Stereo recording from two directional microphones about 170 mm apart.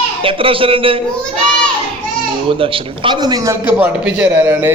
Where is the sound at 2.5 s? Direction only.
30° right (ahead or behind).